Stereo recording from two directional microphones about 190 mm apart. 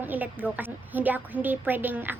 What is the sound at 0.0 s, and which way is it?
A woman's voice, 10° right (ahead or behind).